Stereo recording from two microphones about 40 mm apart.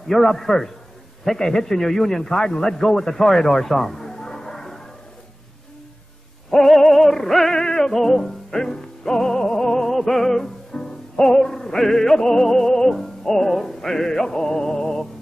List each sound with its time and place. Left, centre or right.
0.1 s a man's voice: centre
6.5 s music: centre